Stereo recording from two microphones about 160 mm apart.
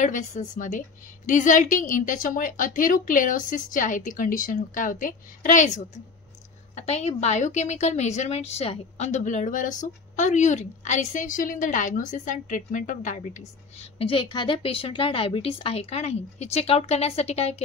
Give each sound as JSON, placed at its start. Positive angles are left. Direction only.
{"t": 0.0, "sound": "a woman's voice", "side_deg": 50}
{"t": 6.7, "sound": "a woman's voice", "side_deg": 45}